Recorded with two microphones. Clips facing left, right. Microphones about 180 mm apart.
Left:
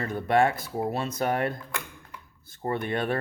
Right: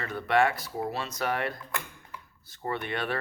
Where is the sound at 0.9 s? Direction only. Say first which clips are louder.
Left 4 dB; 50° left (ahead or behind).